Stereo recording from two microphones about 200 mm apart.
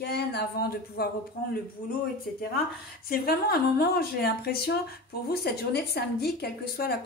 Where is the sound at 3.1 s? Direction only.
50° left (ahead or behind).